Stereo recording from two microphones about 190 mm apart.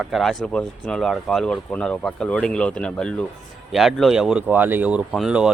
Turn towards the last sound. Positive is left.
turn(degrees=-5)  # may be behind; listen again after turning